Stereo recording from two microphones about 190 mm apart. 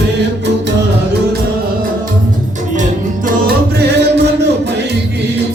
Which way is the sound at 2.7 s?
45° right (ahead or behind).